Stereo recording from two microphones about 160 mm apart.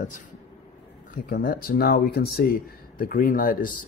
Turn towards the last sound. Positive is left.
turn(degrees=60)  # may be behind; listen again after turning